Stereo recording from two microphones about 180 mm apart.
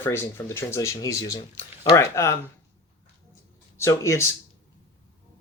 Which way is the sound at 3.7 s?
15° left (ahead or behind).